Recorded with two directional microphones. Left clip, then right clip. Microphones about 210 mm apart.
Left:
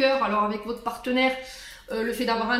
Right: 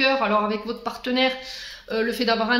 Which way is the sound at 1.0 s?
40° right (ahead or behind).